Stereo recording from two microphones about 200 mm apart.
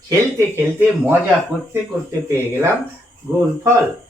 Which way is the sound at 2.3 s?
15° right (ahead or behind).